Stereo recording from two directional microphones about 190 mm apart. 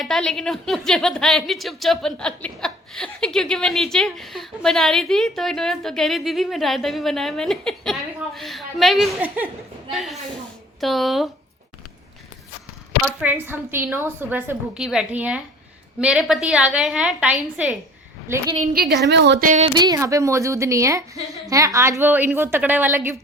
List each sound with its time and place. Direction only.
0.0 s a woman's voice: centre (ahead or behind)
13.2 s a woman's voice: 10° right (ahead or behind)
18.6 s a woman's voice: 50° right (ahead or behind)
19.5 s speech: 35° right (ahead or behind)
19.7 s a woman's voice: 20° right (ahead or behind)